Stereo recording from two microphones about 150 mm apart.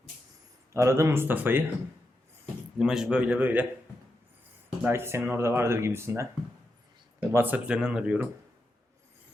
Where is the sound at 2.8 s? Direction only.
5° right (ahead or behind).